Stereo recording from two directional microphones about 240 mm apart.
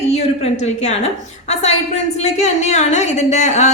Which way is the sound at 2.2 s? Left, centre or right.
Left.